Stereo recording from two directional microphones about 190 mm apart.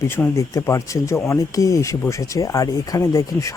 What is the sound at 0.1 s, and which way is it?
A man's voice, 15° left (ahead or behind).